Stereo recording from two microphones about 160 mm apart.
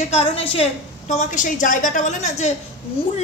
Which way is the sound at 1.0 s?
50° left (ahead or behind).